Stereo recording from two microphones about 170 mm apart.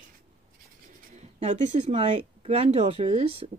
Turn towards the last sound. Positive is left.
turn(degrees=-40)  # may be behind; listen again after turning